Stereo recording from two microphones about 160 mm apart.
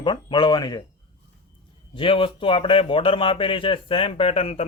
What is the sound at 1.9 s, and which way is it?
A man's voice, 35° left (ahead or behind).